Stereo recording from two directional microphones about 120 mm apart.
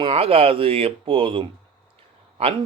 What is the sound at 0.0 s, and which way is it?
Speech, 50° right (ahead or behind).